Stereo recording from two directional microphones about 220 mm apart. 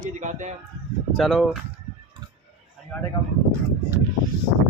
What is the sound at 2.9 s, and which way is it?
Speech, 5° left (ahead or behind).